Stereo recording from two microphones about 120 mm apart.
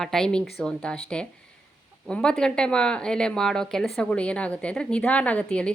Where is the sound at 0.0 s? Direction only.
5° left (ahead or behind).